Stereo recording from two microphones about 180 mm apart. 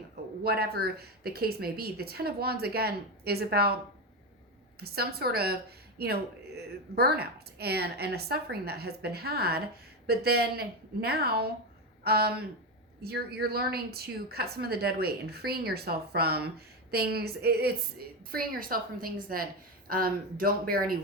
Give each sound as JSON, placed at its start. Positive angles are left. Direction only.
{"t": 0.4, "sound": "a woman's voice", "side_deg": -60}
{"t": 4.8, "sound": "a woman's voice", "side_deg": -60}